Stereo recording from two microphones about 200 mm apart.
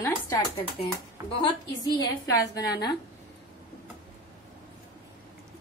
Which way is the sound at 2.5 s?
20° left (ahead or behind).